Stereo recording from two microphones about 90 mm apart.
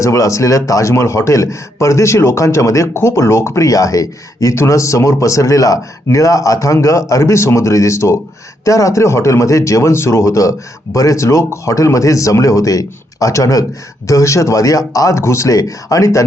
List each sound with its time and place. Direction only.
0.0 s a man's voice: 35° left (ahead or behind)